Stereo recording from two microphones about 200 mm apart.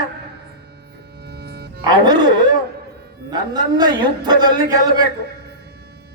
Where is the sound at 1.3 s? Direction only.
55° right (ahead or behind).